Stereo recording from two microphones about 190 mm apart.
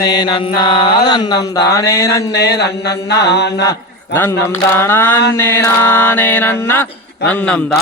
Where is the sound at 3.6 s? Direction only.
15° left (ahead or behind).